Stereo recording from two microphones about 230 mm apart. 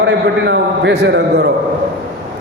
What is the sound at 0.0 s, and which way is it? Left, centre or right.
A man's voice, right.